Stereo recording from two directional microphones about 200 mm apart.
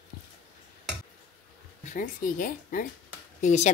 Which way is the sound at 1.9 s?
40° left (ahead or behind).